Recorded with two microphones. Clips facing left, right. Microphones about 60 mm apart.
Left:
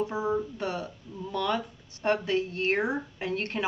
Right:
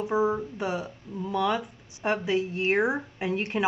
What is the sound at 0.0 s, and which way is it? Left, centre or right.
Speech, centre.